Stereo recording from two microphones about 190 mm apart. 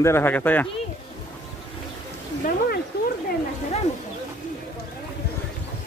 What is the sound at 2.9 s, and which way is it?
Wild animals, 55° left (ahead or behind).